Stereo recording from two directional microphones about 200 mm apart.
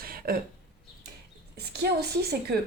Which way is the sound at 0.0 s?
45° right (ahead or behind).